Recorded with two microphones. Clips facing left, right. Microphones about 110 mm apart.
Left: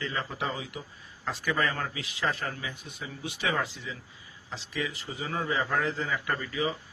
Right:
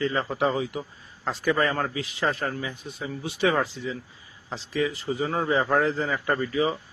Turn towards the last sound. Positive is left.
turn(degrees=-30)  # may be behind; listen again after turning